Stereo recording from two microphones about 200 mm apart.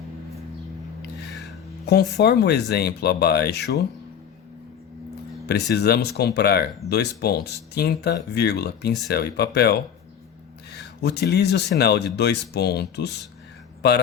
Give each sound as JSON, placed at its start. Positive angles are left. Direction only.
{"t": 1.9, "sound": "speech", "side_deg": 55}
{"t": 5.5, "sound": "speech", "side_deg": 55}